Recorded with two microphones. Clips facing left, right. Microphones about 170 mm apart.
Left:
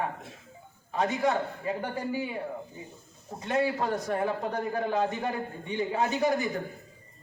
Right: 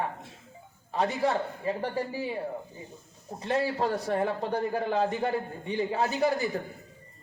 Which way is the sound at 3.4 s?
30° right (ahead or behind).